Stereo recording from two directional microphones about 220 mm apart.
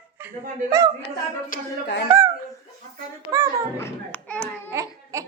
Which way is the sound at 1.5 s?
50° left (ahead or behind).